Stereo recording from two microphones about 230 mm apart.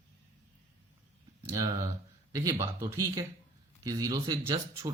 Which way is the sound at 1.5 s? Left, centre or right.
Centre.